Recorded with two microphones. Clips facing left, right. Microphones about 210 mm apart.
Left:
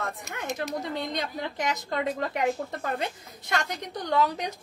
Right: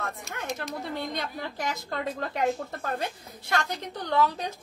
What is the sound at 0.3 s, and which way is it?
Speech, 20° left (ahead or behind).